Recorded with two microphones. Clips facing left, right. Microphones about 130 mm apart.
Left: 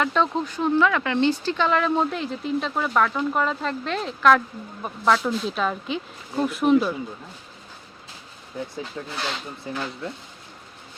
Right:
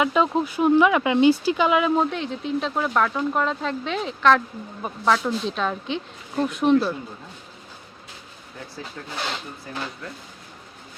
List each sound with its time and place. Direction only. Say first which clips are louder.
0.0 s speech: right 2 dB; 10° right (ahead or behind); by 6.9 s 5° left (ahead or behind)
9.0 s speech: right 1 dB; 15° left (ahead or behind)